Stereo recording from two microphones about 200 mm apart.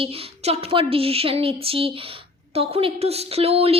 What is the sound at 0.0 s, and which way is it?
A woman's voice, 30° right (ahead or behind).